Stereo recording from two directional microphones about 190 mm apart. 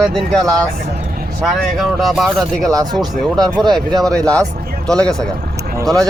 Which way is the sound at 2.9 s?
Centre (ahead or behind).